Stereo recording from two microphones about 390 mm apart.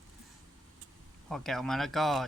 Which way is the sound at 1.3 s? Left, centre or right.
Centre.